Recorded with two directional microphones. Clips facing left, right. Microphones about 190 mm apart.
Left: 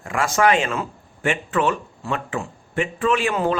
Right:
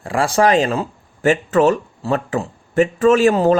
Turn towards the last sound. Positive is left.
turn(degrees=-40)  # may be behind; listen again after turning